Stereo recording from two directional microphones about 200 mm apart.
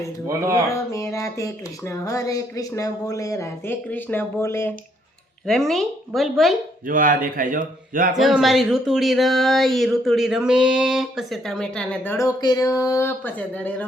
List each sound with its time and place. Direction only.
0.7 s speech: 15° left (ahead or behind)
5.5 s speech: centre (ahead or behind)
6.8 s speech: 45° right (ahead or behind)
8.1 s speech: centre (ahead or behind)